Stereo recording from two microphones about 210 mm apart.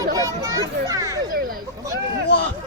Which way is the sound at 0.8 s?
15° right (ahead or behind).